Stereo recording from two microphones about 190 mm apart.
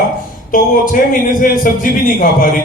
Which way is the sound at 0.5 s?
45° left (ahead or behind).